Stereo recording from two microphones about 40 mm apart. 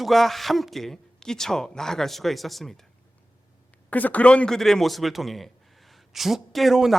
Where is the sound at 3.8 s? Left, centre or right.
Left.